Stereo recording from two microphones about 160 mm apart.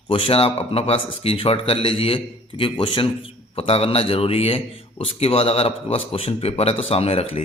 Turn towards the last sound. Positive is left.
turn(degrees=40)  # may be behind; listen again after turning